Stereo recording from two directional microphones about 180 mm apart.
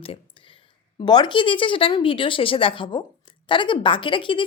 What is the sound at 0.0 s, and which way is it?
A woman's voice, 30° left (ahead or behind).